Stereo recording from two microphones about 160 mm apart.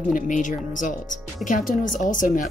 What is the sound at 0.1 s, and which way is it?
Speech, 55° left (ahead or behind).